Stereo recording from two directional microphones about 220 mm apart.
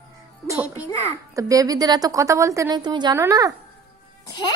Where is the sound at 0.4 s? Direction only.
15° right (ahead or behind).